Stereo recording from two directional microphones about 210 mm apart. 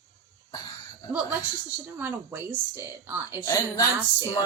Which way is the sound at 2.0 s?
10° right (ahead or behind).